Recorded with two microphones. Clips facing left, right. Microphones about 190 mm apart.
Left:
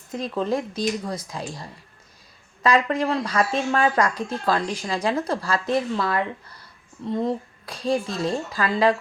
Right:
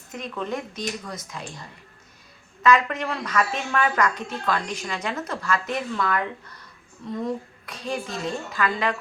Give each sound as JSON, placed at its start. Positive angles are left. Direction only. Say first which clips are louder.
{"t": 0.1, "sound": "a woman's voice", "louder": "left 5 dB", "side_deg": 35}
{"t": 2.6, "sound": "a woman's voice", "louder": "left 1 dB", "side_deg": 35}